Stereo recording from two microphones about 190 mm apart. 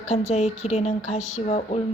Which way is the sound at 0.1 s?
35° left (ahead or behind).